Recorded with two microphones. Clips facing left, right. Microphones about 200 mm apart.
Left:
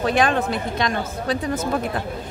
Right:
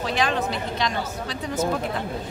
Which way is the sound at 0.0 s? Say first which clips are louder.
Left 5 dB; 50° left (ahead or behind).